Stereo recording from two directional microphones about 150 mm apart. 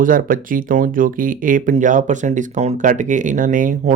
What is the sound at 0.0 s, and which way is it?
Speech, 65° right (ahead or behind).